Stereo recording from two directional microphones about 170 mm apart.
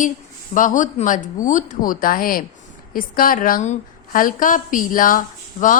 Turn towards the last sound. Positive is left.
turn(degrees=50)  # may be behind; listen again after turning